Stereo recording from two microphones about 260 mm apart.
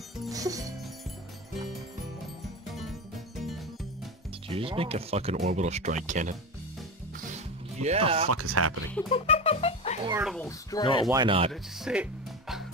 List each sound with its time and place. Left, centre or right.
0.3 s music: centre
2.7 s music: centre
4.5 s speech: right
7.7 s speech: right
8.3 s speech: right
9.1 s music: left
10.0 s speech: centre
10.4 s speech: centre
11.1 s speech: centre
11.5 s speech: centre